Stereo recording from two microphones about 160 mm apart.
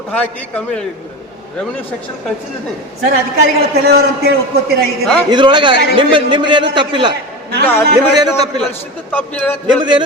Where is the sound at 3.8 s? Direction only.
90° right.